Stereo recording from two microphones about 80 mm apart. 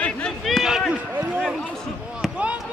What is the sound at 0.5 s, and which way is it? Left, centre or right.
Run, centre.